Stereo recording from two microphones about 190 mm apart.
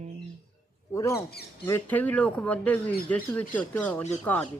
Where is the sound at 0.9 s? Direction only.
15° left (ahead or behind).